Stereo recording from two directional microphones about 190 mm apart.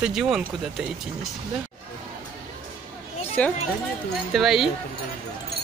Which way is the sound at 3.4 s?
5° left (ahead or behind).